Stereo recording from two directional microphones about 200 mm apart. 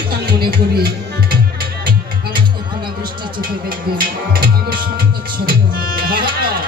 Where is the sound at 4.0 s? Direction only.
45° right (ahead or behind).